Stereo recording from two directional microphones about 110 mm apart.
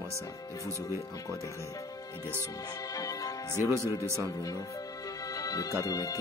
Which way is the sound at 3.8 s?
30° left (ahead or behind).